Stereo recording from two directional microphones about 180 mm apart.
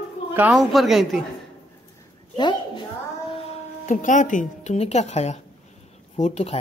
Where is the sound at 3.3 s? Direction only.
30° left (ahead or behind).